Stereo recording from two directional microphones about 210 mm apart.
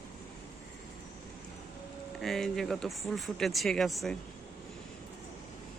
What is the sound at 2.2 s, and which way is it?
Speech, centre (ahead or behind).